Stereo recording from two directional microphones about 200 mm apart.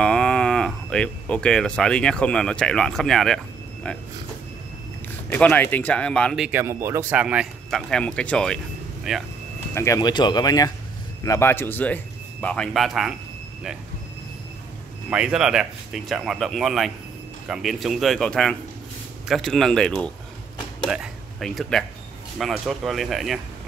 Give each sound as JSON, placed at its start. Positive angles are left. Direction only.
{"t": 0.0, "sound": "speech", "side_deg": 5}
{"t": 5.3, "sound": "speech", "side_deg": 10}
{"t": 9.8, "sound": "speech", "side_deg": 15}
{"t": 15.0, "sound": "speech", "side_deg": -5}